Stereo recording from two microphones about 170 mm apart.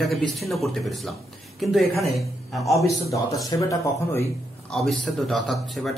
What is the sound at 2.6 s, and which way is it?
Speech, 20° left (ahead or behind).